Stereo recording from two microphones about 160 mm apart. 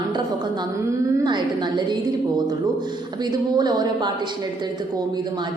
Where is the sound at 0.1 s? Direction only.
25° right (ahead or behind).